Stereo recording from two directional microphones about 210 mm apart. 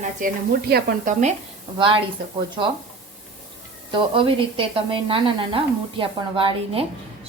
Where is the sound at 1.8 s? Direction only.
25° right (ahead or behind).